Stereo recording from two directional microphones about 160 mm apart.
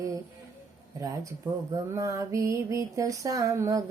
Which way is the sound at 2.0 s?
20° right (ahead or behind).